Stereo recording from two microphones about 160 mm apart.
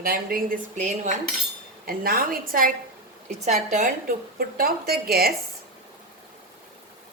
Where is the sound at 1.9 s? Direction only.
65° right (ahead or behind).